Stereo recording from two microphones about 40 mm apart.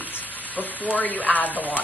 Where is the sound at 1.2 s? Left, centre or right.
Left.